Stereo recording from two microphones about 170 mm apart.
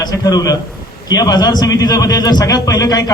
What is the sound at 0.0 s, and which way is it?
A man's voice, 20° left (ahead or behind).